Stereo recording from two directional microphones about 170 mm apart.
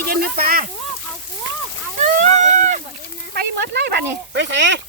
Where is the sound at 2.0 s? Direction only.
45° right (ahead or behind).